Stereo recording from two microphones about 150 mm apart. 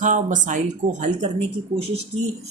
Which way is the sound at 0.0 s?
55° right (ahead or behind).